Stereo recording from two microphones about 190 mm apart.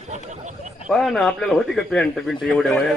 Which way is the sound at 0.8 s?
Centre (ahead or behind).